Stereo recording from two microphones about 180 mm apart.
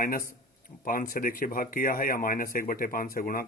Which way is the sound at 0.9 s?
50° left (ahead or behind).